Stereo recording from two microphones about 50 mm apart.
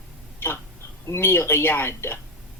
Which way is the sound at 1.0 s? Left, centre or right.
Left.